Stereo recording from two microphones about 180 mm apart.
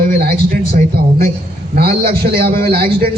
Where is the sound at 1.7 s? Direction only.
60° right (ahead or behind).